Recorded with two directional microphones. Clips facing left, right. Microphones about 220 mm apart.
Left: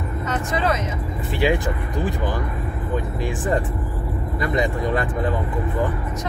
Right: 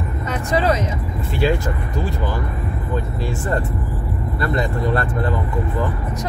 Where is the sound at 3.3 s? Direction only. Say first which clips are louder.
Left 1 dB; 15° left (ahead or behind).